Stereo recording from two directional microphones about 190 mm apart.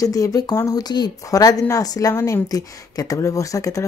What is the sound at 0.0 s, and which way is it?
Speech, 20° left (ahead or behind).